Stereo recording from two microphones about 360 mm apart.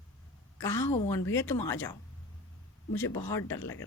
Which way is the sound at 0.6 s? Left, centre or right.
Centre.